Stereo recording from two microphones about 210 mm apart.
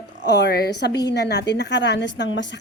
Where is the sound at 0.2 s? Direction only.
55° left (ahead or behind).